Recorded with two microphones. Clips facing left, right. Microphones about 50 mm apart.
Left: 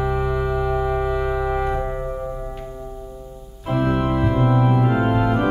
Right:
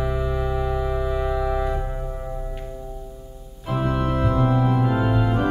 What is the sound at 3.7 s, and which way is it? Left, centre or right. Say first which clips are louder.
Organ: left 3 dB; left.